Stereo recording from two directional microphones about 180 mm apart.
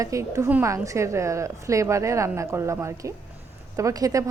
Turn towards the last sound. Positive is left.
turn(degrees=-20)  # may be behind; listen again after turning